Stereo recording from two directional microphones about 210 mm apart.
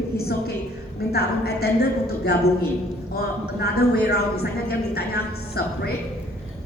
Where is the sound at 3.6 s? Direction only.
50° left (ahead or behind).